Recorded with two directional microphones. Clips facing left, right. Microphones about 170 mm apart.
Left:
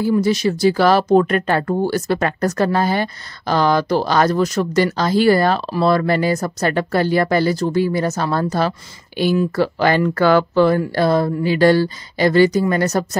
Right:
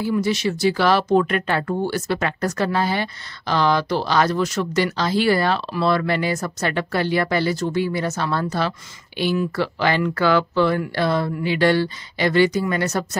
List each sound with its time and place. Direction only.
0.0 s speech: 40° left (ahead or behind)